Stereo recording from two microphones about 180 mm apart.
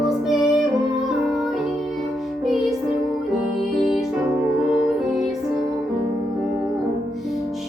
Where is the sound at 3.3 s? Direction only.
Centre (ahead or behind).